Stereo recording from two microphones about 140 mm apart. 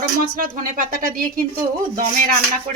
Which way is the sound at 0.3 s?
75° right (ahead or behind).